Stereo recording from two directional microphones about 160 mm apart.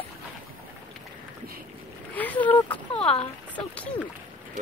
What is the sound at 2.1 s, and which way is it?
Boat, 10° left (ahead or behind).